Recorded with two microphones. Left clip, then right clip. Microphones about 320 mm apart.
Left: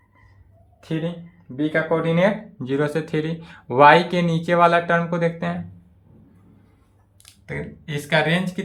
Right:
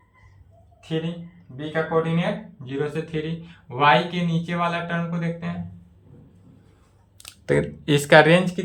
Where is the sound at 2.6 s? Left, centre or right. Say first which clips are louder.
Left 5 dB; centre.